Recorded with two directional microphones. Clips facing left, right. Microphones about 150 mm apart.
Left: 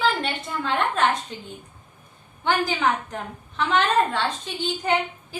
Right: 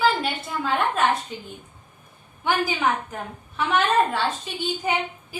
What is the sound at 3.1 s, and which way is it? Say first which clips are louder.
A woman's voice: left 1 dB; 5° right (ahead or behind).